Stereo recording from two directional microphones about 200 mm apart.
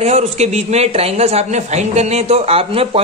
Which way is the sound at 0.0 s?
35° right (ahead or behind).